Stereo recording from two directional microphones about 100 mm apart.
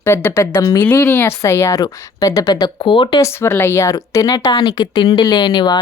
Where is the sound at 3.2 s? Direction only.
25° left (ahead or behind).